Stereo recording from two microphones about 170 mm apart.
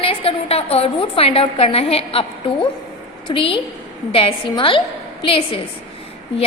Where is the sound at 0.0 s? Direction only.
35° left (ahead or behind).